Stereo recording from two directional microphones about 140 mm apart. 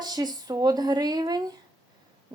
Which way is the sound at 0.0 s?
30° right (ahead or behind).